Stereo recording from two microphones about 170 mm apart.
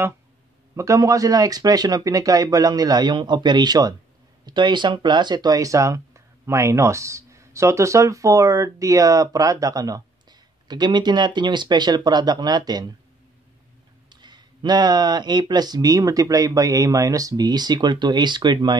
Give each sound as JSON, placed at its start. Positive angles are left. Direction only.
{"t": 0.7, "sound": "speech", "side_deg": -20}
{"t": 14.0, "sound": "speech", "side_deg": -25}